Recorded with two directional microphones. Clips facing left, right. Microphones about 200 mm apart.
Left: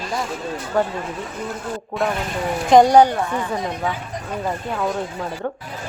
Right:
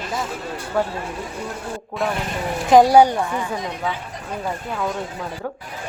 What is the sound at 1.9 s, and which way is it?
Speech, centre (ahead or behind).